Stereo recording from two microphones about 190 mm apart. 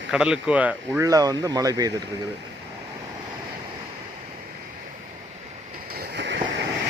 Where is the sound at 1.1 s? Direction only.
20° right (ahead or behind).